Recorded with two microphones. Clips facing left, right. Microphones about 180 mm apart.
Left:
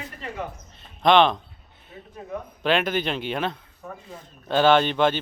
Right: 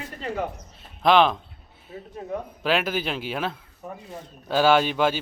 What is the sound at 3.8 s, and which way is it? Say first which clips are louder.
Speech: right 1 dB; 15° right (ahead or behind).